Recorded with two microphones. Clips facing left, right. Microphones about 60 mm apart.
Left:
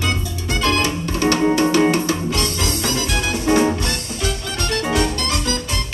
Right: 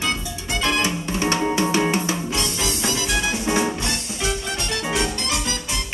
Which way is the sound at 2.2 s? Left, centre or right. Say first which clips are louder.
Left 3 dB; left.